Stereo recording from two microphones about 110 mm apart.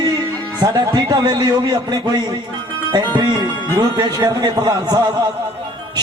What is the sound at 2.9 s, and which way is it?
A man's voice, 40° right (ahead or behind).